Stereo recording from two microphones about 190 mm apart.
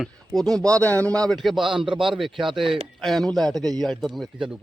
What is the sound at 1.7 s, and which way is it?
Speech, 25° right (ahead or behind).